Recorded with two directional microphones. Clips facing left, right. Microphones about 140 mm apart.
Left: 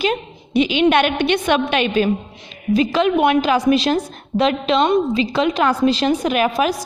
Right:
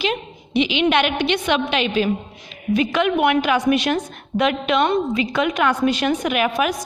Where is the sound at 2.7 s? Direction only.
35° left (ahead or behind).